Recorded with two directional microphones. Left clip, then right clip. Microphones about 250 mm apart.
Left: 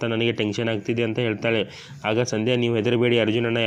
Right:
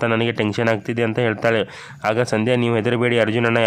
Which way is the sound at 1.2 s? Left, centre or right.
Centre.